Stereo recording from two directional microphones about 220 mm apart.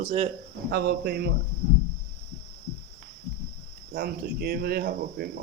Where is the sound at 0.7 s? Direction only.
45° right (ahead or behind).